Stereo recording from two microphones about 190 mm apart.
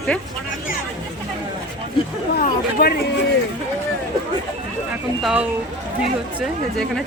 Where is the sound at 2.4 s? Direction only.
50° left (ahead or behind).